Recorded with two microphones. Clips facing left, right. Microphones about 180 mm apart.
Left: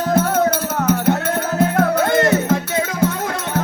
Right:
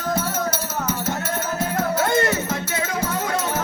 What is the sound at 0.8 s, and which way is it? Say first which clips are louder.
Music: left 11 dB; 60° left (ahead or behind).